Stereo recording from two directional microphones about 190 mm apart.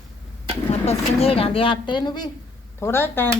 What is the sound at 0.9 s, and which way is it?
Speech, 30° left (ahead or behind).